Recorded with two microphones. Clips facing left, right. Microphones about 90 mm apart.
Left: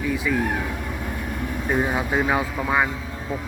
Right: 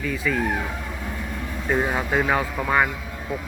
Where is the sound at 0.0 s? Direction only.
15° left (ahead or behind).